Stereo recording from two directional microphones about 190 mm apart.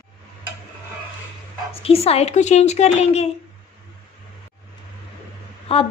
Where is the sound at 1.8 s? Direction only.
30° left (ahead or behind).